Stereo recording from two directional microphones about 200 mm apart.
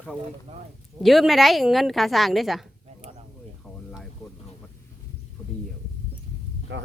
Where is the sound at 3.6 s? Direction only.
Centre (ahead or behind).